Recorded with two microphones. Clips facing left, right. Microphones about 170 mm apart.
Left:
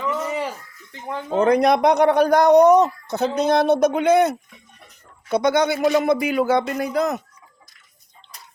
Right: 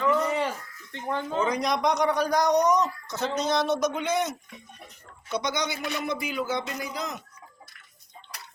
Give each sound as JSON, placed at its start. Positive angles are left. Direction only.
{"t": 0.0, "sound": "a sound", "side_deg": 5}
{"t": 0.9, "sound": "speech", "side_deg": 5}
{"t": 1.4, "sound": "speech", "side_deg": 60}